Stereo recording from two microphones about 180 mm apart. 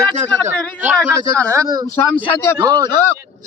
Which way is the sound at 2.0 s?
10° left (ahead or behind).